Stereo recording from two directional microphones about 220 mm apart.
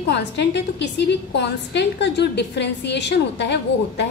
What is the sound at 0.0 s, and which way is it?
A woman's voice, 50° left (ahead or behind).